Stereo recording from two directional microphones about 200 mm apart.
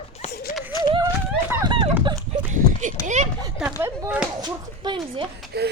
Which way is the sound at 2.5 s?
40° right (ahead or behind).